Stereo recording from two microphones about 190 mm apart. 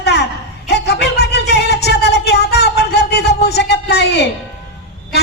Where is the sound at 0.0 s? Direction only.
60° left (ahead or behind).